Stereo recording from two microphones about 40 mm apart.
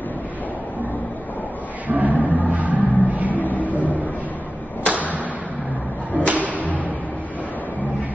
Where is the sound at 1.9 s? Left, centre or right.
Right.